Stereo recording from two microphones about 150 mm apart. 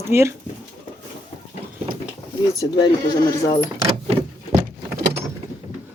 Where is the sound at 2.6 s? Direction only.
30° left (ahead or behind).